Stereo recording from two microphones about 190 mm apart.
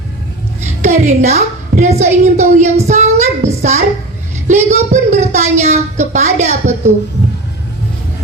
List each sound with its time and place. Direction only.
0.6 s a woman's voice: 40° right (ahead or behind)